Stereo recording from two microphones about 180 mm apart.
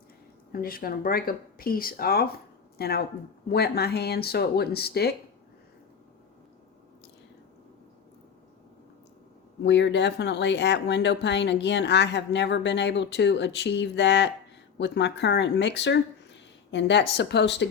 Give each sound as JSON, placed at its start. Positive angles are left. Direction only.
{"t": 0.5, "sound": "speech", "side_deg": 55}
{"t": 9.6, "sound": "speech", "side_deg": 75}